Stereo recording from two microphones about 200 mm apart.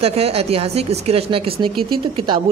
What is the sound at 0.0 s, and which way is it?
A woman's voice, 30° right (ahead or behind).